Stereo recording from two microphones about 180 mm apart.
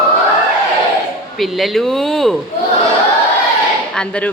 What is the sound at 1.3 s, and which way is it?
Speech, centre (ahead or behind).